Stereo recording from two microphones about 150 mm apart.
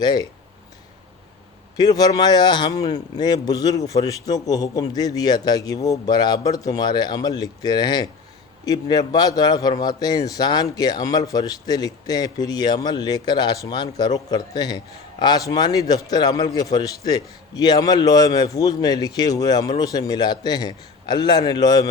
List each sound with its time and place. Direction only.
0.0 s a man's voice: 30° left (ahead or behind)
1.7 s a man's voice: 25° left (ahead or behind)